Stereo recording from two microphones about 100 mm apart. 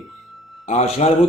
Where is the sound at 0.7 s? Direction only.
90° left.